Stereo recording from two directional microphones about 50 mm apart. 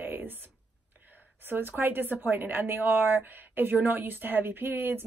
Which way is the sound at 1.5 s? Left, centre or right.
Right.